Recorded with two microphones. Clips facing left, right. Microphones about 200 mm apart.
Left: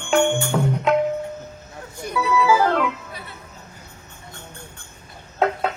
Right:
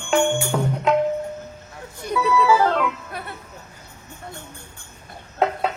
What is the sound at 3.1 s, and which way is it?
Music, 55° right (ahead or behind).